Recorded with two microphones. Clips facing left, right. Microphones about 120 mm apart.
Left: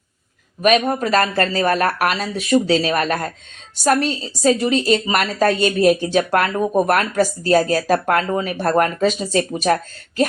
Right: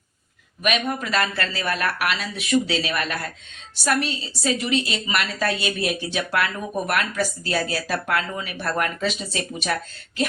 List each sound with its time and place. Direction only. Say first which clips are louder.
0.6 s speech: left 8 dB; 40° left (ahead or behind)